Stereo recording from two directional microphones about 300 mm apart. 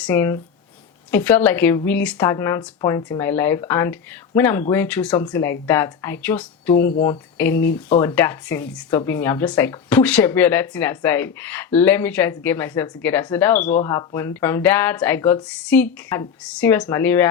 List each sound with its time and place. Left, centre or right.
0.0 s speech: centre